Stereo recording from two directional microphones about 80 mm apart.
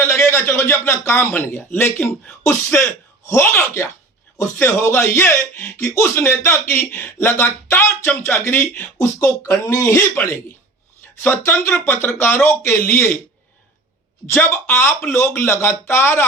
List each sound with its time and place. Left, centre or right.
0.0 s speech: left
9.1 s speech: left
11.2 s speech: left
14.3 s speech: left